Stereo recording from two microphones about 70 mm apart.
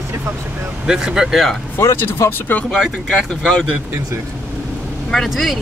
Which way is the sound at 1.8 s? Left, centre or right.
Left.